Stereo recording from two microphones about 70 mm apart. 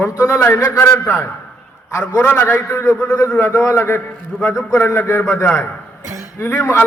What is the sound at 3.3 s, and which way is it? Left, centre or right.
A man's voice, left.